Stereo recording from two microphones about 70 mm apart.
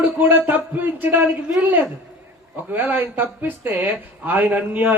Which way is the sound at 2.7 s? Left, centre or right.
Right.